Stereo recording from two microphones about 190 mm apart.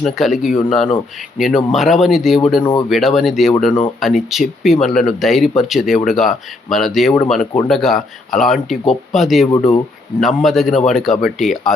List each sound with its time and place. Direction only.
0.0 s speech: centre (ahead or behind)